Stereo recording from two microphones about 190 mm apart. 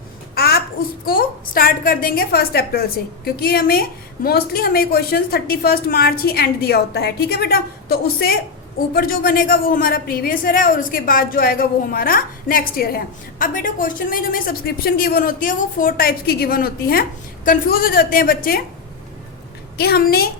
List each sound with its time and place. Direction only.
0.3 s a child's voice: 55° left (ahead or behind)
19.7 s a woman's voice: 55° left (ahead or behind)